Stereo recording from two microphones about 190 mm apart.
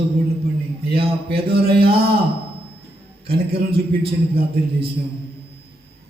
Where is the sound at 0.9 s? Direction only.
55° right (ahead or behind).